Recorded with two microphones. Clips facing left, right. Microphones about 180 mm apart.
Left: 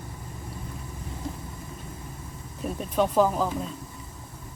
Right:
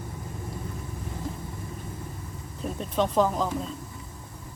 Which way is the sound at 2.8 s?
5° left (ahead or behind).